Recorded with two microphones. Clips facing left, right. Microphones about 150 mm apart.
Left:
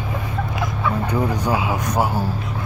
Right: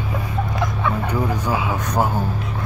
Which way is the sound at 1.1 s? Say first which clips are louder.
Left 1 dB; 15° left (ahead or behind).